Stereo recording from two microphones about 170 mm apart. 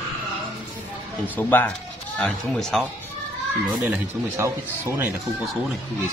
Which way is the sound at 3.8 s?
15° right (ahead or behind).